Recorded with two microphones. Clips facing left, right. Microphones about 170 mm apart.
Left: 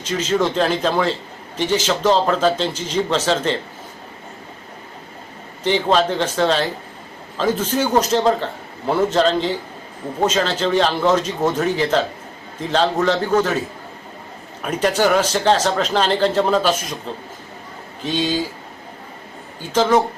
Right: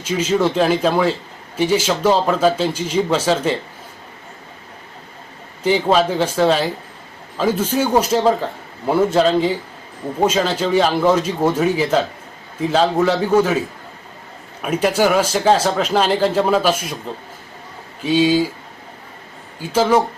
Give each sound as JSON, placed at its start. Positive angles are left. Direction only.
{"t": 0.0, "sound": "speech", "side_deg": -10}
{"t": 5.6, "sound": "speech", "side_deg": -10}
{"t": 18.0, "sound": "speech", "side_deg": -10}
{"t": 19.6, "sound": "speech", "side_deg": -10}